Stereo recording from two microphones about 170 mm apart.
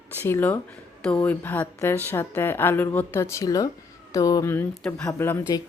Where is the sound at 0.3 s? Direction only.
15° left (ahead or behind).